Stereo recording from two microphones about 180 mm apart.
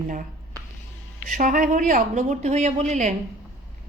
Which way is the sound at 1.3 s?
45° right (ahead or behind).